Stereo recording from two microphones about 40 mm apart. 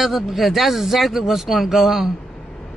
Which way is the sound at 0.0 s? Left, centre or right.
Centre.